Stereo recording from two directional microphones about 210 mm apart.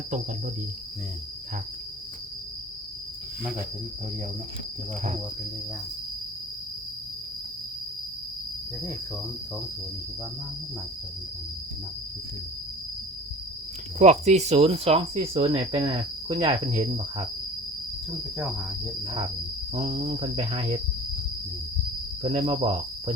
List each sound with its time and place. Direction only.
14.0 s speech: 30° right (ahead or behind)
15.4 s cricket: 25° right (ahead or behind)
19.7 s cricket: 30° right (ahead or behind)
22.2 s speech: 25° right (ahead or behind)